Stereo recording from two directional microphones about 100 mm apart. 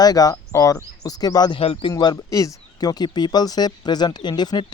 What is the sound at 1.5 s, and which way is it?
Speech, 70° left (ahead or behind).